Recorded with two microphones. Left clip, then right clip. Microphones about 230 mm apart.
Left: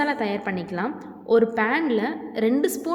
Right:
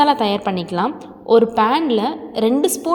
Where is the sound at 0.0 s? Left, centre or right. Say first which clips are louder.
Right 9 dB; right.